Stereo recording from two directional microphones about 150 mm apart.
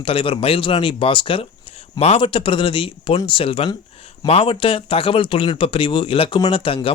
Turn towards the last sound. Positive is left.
turn(degrees=35)  # may be behind; listen again after turning